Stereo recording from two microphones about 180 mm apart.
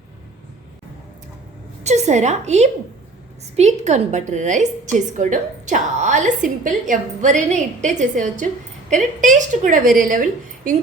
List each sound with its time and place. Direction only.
1.8 s a woman's voice: 40° right (ahead or behind)